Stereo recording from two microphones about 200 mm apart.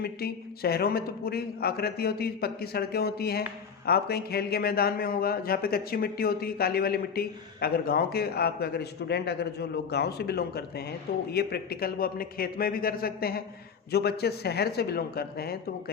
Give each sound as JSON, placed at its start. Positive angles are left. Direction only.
{"t": 0.0, "sound": "speech", "side_deg": 50}